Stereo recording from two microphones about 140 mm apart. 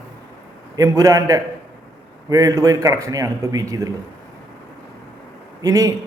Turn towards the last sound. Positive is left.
turn(degrees=-25)  # may be behind; listen again after turning